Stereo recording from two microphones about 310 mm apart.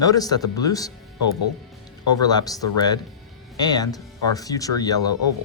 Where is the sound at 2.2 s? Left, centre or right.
Centre.